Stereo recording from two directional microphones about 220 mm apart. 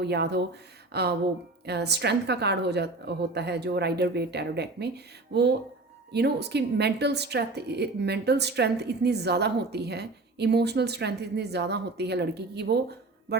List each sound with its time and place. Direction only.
0.0 s a woman's voice: 50° right (ahead or behind)